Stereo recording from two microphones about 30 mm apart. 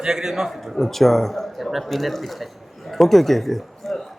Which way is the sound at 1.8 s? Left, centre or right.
Centre.